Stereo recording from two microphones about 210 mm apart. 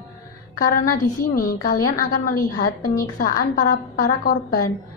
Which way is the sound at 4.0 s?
45° left (ahead or behind).